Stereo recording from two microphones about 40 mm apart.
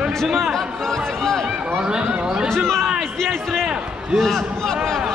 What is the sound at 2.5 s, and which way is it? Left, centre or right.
Speech, centre.